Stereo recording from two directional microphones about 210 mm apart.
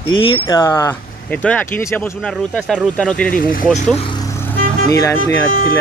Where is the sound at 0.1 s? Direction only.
20° left (ahead or behind); by 3.3 s 5° left (ahead or behind).